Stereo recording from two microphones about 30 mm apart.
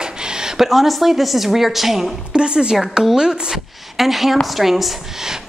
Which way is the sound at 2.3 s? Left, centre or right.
Right.